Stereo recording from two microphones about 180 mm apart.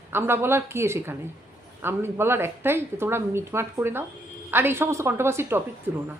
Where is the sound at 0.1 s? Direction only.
15° right (ahead or behind).